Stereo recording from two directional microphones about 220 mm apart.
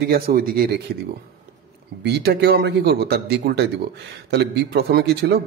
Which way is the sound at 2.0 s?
50° right (ahead or behind).